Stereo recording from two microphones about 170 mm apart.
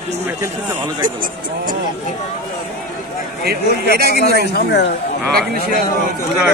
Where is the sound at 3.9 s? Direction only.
65° right (ahead or behind).